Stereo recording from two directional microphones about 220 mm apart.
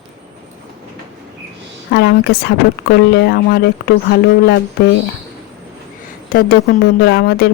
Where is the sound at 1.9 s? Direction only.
45° left (ahead or behind).